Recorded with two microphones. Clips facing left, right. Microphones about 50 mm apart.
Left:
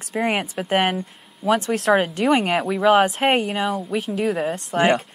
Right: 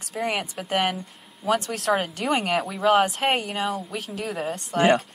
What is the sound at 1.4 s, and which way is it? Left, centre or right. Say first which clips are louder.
A woman's voice: left 5 dB; centre.